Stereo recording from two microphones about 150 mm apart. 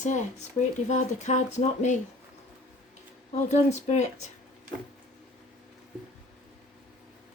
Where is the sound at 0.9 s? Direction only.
50° left (ahead or behind).